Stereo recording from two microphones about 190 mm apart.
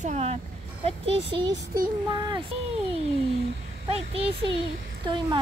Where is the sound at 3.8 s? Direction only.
30° right (ahead or behind).